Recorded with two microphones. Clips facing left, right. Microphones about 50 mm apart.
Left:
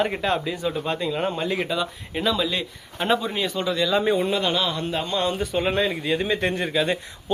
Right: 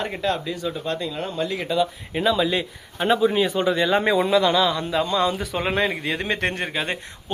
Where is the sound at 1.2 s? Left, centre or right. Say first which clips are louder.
Left 1 dB; left.